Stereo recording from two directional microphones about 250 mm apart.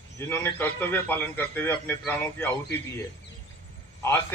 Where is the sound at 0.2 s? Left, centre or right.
Centre.